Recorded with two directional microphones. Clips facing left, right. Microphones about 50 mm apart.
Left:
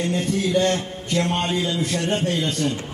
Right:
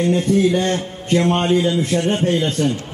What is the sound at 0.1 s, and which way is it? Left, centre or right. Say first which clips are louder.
A man's voice: right 5 dB; right.